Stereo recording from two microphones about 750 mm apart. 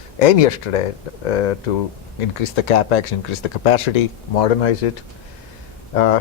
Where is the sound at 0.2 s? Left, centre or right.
Left.